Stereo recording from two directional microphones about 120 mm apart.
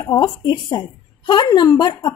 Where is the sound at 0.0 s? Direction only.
40° left (ahead or behind).